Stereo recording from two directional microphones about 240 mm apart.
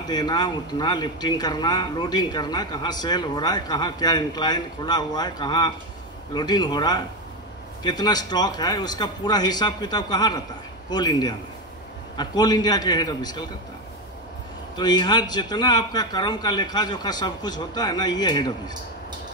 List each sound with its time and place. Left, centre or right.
0.1 s speech: centre
14.8 s speech: centre